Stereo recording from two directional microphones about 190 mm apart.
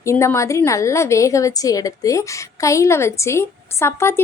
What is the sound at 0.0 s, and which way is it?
A woman's voice, 15° left (ahead or behind).